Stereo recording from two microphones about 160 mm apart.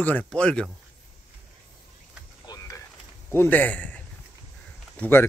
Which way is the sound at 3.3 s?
15° left (ahead or behind).